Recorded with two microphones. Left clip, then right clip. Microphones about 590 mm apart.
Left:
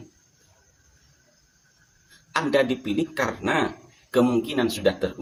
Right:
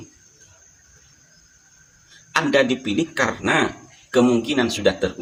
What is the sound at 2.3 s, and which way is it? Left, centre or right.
Speech, left.